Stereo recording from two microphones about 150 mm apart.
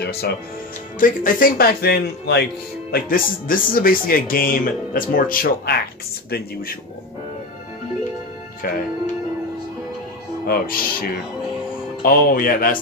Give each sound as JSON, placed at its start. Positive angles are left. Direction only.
{"t": 0.0, "sound": "speech", "side_deg": 90}
{"t": 0.9, "sound": "speech", "side_deg": 65}
{"t": 2.9, "sound": "speech", "side_deg": 70}
{"t": 6.3, "sound": "speech", "side_deg": 80}
{"t": 8.6, "sound": "speech", "side_deg": 75}
{"t": 10.4, "sound": "speech", "side_deg": 80}